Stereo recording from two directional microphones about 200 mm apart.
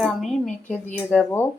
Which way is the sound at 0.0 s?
Centre (ahead or behind).